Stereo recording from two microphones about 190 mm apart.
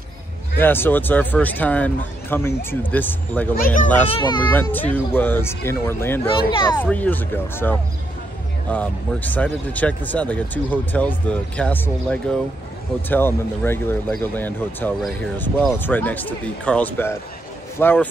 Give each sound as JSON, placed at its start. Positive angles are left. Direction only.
{"t": 0.6, "sound": "speech", "side_deg": 10}
{"t": 3.5, "sound": "speech", "side_deg": 45}
{"t": 4.1, "sound": "speech", "side_deg": 25}
{"t": 4.4, "sound": "speech", "side_deg": 10}